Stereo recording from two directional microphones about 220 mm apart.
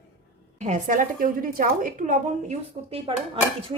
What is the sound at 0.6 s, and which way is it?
A woman's voice, 35° right (ahead or behind).